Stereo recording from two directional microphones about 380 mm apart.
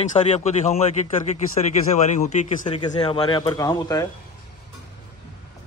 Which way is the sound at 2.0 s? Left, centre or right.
Centre.